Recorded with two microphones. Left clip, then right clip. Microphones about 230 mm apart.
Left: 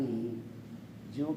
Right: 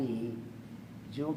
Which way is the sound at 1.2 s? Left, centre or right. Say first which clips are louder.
Even; right.